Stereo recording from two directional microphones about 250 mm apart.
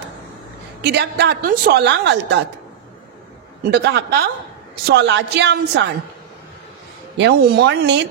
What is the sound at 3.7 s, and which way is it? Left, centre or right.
A woman's voice, right.